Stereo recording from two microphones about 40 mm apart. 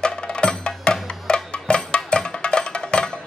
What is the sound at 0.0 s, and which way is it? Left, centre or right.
Music, left.